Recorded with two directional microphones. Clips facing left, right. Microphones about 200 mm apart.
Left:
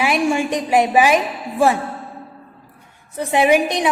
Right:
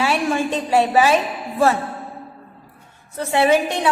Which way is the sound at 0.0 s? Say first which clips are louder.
Left 2 dB; 15° left (ahead or behind).